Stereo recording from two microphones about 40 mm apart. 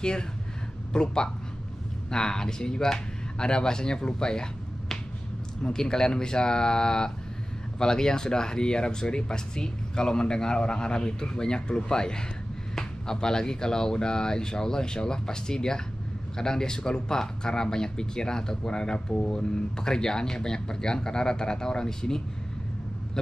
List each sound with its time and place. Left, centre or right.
0.9 s speech: left
5.6 s speech: centre
23.2 s owl: centre